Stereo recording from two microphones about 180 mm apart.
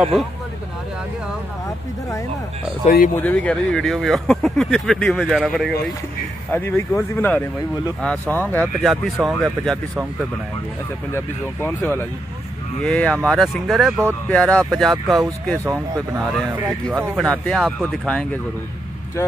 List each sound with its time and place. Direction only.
0.0 s speech: centre (ahead or behind)
3.2 s speech: 10° left (ahead or behind)
6.5 s speech: 10° left (ahead or behind)
11.1 s speech: 10° left (ahead or behind)
15.6 s speech: 15° right (ahead or behind)
16.3 s speech: centre (ahead or behind)